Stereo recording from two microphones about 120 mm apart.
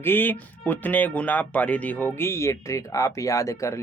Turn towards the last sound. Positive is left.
turn(degrees=25)  # may be behind; listen again after turning